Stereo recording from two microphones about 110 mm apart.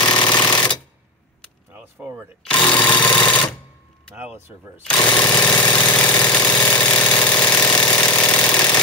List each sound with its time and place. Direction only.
0.0 s sewing machine: 45° left (ahead or behind)
0.5 s machine gun: 40° left (ahead or behind)
1.7 s keys jangling: 15° right (ahead or behind)
2.5 s sewing machine: 45° left (ahead or behind)
4.1 s speech: 15° right (ahead or behind)
5.0 s engine: 40° left (ahead or behind)
5.9 s engine: 15° left (ahead or behind)
7.2 s engine: 40° left (ahead or behind)
8.0 s engine: 15° left (ahead or behind)